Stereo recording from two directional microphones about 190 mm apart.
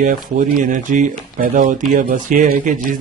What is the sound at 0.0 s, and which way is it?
Speech, 40° right (ahead or behind).